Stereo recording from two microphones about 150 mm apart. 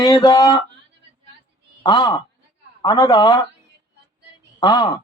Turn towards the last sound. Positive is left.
turn(degrees=25)  # may be behind; listen again after turning